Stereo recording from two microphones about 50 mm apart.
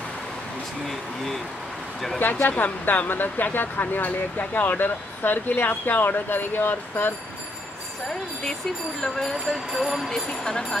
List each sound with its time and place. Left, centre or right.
0.8 s speech: centre
2.1 s speech: left
9.0 s speech: centre
9.7 s speech: centre